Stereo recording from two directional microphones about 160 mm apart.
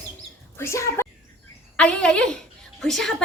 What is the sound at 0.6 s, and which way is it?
Speech, 15° left (ahead or behind).